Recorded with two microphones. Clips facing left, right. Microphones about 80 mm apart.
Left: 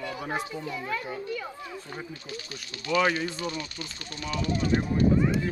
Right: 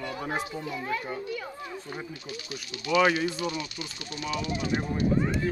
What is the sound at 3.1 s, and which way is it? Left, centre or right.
Speech, left.